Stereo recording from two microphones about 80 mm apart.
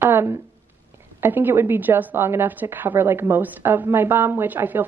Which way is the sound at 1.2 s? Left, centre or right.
Right.